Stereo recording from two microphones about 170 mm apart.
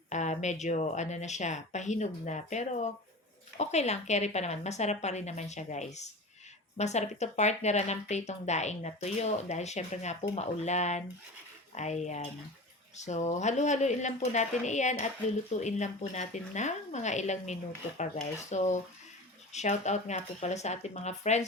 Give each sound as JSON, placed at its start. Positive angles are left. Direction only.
{"t": 0.1, "sound": "speech", "side_deg": 45}